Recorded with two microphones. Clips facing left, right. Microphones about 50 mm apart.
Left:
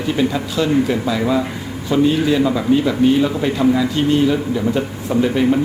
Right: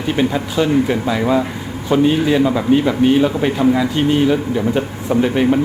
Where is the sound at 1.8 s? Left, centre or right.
Right.